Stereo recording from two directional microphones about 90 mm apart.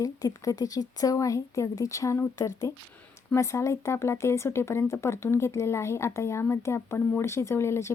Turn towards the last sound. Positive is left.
turn(degrees=30)  # may be behind; listen again after turning